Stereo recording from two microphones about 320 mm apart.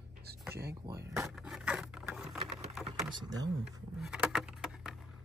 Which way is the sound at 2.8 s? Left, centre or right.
Centre.